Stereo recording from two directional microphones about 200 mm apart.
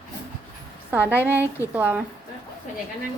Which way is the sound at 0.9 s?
10° right (ahead or behind).